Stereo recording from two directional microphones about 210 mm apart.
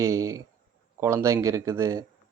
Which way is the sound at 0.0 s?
15° right (ahead or behind).